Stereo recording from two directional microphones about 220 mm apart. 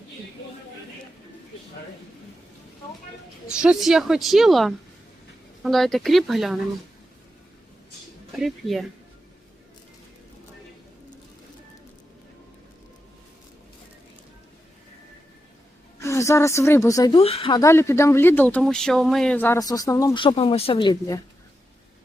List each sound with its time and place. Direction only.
3.5 s a woman's voice: 5° right (ahead or behind)
8.4 s a woman's voice: centre (ahead or behind)
16.0 s a woman's voice: 15° left (ahead or behind)